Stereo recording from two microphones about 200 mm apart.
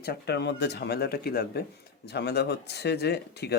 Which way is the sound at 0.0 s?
55° left (ahead or behind).